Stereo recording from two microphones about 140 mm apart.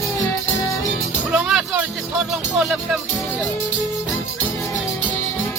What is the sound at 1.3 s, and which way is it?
Music, 5° right (ahead or behind).